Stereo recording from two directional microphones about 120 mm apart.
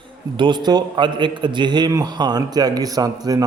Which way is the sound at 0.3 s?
40° right (ahead or behind).